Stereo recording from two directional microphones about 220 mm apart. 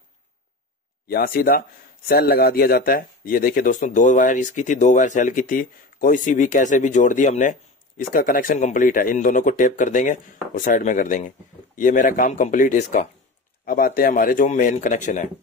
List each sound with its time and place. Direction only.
1.0 s speech: 40° left (ahead or behind)